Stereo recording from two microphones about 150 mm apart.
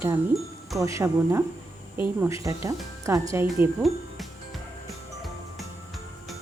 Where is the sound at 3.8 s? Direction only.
Centre (ahead or behind).